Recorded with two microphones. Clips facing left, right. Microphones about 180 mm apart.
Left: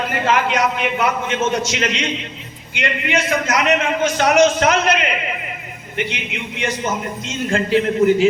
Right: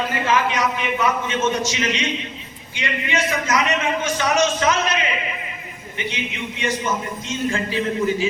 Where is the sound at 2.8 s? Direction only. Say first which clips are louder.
Left 3 dB; 65° left (ahead or behind).